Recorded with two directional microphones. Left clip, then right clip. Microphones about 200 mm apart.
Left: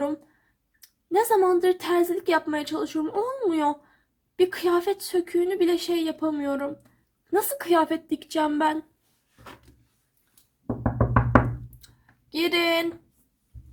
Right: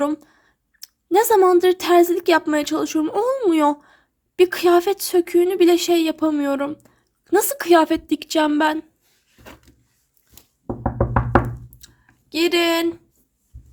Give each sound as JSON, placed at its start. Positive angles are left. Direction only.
{"t": 0.0, "sound": "a woman's voice", "side_deg": -45}
{"t": 12.3, "sound": "a woman's voice", "side_deg": -45}